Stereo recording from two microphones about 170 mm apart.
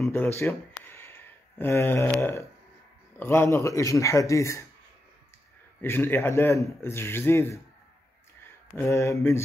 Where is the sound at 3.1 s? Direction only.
15° left (ahead or behind).